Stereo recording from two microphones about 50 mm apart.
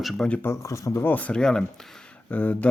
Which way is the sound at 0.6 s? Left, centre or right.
Left.